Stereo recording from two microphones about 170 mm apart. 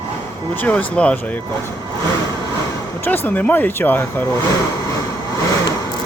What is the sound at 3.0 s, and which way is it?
Speech, 10° left (ahead or behind).